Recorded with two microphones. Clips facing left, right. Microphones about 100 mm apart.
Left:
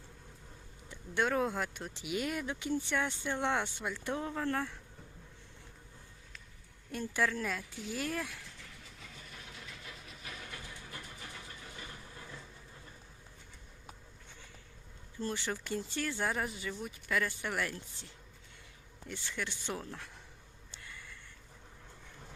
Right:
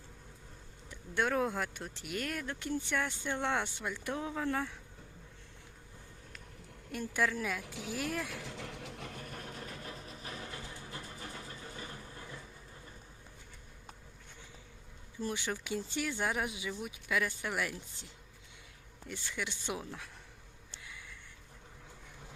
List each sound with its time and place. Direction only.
0.9 s speech: centre (ahead or behind)
3.9 s speech: 5° right (ahead or behind)
6.9 s speech: centre (ahead or behind)
7.6 s speech: 70° right (ahead or behind)
7.9 s speech: centre (ahead or behind)
8.3 s vehicle: 85° right; by 12.2 s 25° right (ahead or behind)
12.2 s vehicle: 5° right (ahead or behind)
15.2 s speech: 10° right (ahead or behind)
20.8 s a sound: 5° right (ahead or behind)